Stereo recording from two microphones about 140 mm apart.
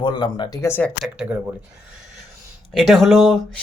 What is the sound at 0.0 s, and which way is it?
Speech, 35° left (ahead or behind).